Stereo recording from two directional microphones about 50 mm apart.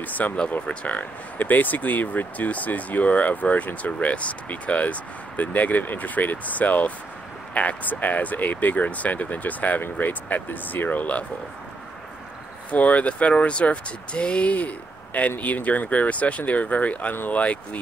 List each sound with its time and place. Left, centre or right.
0.0 s speech: left
12.7 s speech: left